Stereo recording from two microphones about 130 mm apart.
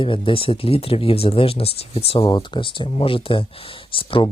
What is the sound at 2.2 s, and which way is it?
Speech, 35° left (ahead or behind).